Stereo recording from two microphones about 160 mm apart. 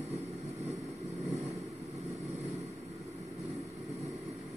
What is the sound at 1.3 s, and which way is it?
Vehicle, 45° right (ahead or behind).